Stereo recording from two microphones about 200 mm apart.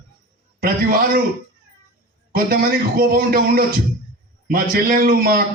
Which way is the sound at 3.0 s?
45° right (ahead or behind).